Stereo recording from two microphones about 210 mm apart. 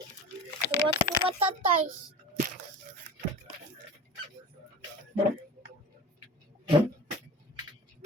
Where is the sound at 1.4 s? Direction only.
25° right (ahead or behind).